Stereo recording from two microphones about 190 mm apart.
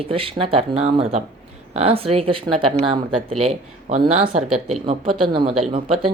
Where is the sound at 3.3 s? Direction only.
30° right (ahead or behind).